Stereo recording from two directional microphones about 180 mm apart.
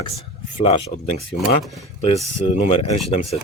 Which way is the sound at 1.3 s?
60° left (ahead or behind).